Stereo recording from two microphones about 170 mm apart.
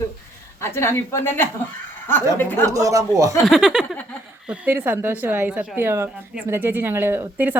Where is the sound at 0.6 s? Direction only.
15° left (ahead or behind).